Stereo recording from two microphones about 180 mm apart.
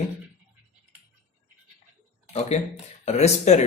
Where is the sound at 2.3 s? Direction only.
35° left (ahead or behind).